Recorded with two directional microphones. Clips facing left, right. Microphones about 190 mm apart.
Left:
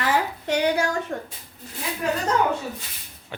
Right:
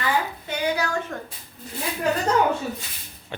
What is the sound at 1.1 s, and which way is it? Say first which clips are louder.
Speech: left 3 dB; 30° left (ahead or behind).